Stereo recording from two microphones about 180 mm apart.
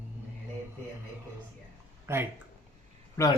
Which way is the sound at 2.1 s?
15° right (ahead or behind).